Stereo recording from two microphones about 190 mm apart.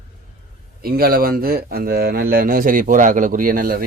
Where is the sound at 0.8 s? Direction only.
50° right (ahead or behind).